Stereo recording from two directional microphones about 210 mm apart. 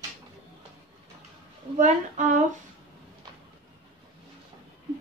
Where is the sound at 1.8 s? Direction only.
35° right (ahead or behind).